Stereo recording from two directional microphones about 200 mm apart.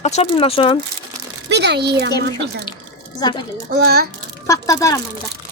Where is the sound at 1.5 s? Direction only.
55° right (ahead or behind).